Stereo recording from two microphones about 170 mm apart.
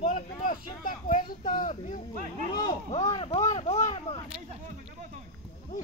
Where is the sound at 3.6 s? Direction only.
40° left (ahead or behind).